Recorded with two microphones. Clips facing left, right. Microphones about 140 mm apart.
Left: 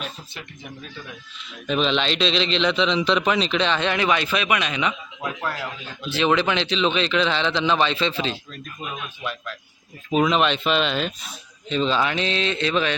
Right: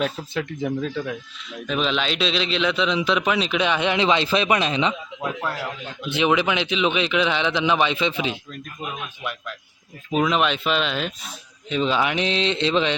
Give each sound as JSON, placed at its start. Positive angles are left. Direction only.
{"t": 0.0, "sound": "speech", "side_deg": -90}
{"t": 1.5, "sound": "a man's voice", "side_deg": 0}
{"t": 10.1, "sound": "a man's voice", "side_deg": 0}